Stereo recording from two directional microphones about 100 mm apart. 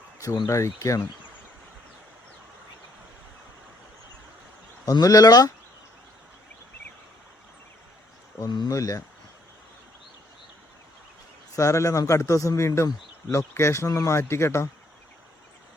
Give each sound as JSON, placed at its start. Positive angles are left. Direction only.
{"t": 0.4, "sound": "a man's voice", "side_deg": 30}
{"t": 4.9, "sound": "a man's voice", "side_deg": 40}
{"t": 8.4, "sound": "a man's voice", "side_deg": 40}
{"t": 11.5, "sound": "a man's voice", "side_deg": 30}